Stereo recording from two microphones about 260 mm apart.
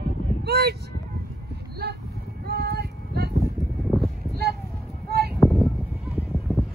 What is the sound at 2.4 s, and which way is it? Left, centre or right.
Female singing, right.